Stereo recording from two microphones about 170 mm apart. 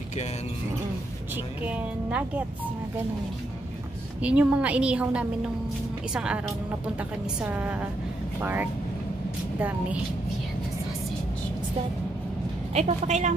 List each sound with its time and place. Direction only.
1.3 s speech: 10° right (ahead or behind)
4.2 s speech: 5° right (ahead or behind)
12.7 s a woman's voice: 45° right (ahead or behind)